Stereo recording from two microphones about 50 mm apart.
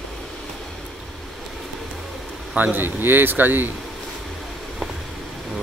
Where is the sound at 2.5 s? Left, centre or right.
Right.